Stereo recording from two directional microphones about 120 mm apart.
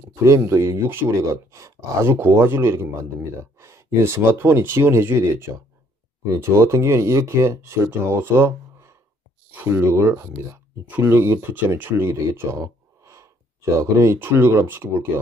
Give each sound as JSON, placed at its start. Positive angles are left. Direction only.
{"t": 0.4, "sound": "speech", "side_deg": -25}